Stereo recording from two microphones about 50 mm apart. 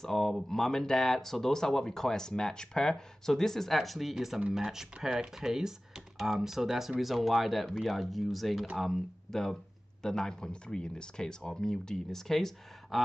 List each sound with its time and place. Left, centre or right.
0.0 s speech: centre